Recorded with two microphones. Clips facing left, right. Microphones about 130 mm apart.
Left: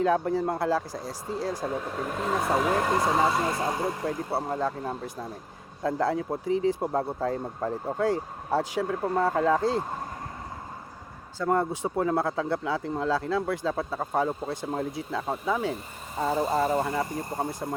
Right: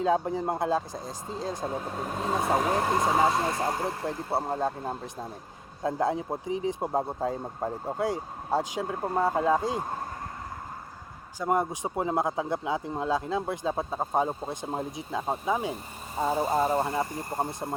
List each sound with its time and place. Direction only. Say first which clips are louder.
0.0 s speech: left 2 dB; 20° right (ahead or behind)
2.7 s speech: even; 20° right (ahead or behind)
5.8 s speech: left 1 dB; 20° right (ahead or behind)
11.3 s speech: left 1 dB; 15° right (ahead or behind)